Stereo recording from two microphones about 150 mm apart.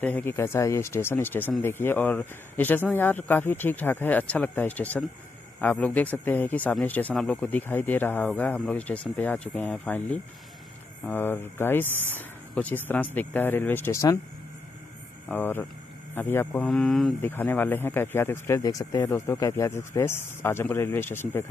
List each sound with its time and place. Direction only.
0.0 s speech: 15° left (ahead or behind)
11.1 s speech: 15° left (ahead or behind)
11.9 s speech: 15° right (ahead or behind)
12.2 s speech: 10° left (ahead or behind)
15.2 s speech: 15° left (ahead or behind)
16.6 s speech: 5° left (ahead or behind)
17.2 s speech: 15° left (ahead or behind)